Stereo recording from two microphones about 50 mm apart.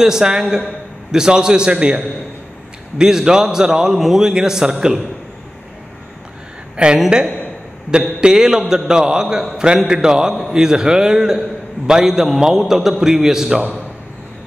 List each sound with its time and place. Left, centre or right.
0.0 s a man's voice: centre
6.8 s a woman's voice: right
8.2 s a man's voice: centre